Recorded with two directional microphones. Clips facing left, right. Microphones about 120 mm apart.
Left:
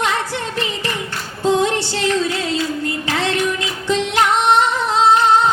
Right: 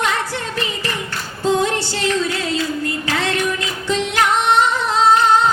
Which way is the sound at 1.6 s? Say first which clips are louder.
Left 1 dB; 25° left (ahead or behind).